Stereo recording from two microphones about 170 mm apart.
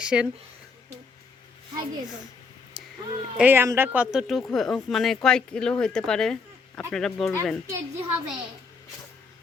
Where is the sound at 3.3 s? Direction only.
10° right (ahead or behind).